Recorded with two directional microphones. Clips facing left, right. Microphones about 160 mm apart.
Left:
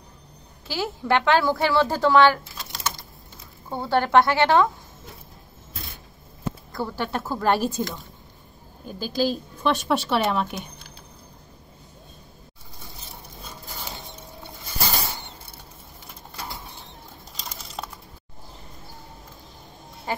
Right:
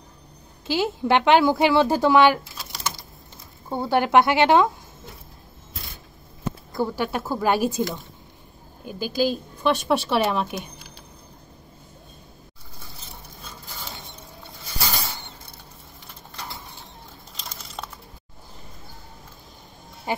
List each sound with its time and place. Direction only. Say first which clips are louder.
0.7 s a woman's voice: right 3 dB; 20° right (ahead or behind)
6.7 s a woman's voice: right 4 dB; 15° right (ahead or behind)
17.4 s a sound: left 1 dB; 5° left (ahead or behind)
20.1 s duck: right 2 dB; 15° right (ahead or behind)